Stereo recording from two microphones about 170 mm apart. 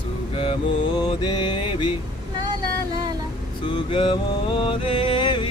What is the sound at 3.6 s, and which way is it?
Music, 30° left (ahead or behind).